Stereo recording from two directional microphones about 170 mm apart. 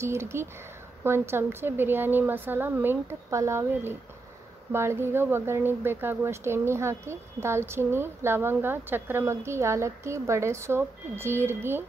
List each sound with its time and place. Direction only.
0.0 s speech: 15° right (ahead or behind)